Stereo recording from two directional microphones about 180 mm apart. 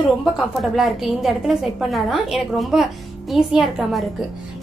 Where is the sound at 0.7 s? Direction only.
Centre (ahead or behind).